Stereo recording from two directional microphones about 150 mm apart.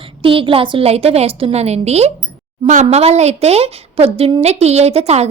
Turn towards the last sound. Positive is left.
turn(degrees=-45)  # may be behind; listen again after turning